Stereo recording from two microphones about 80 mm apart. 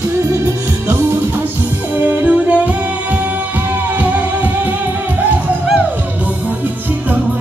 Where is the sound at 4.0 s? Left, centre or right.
Centre.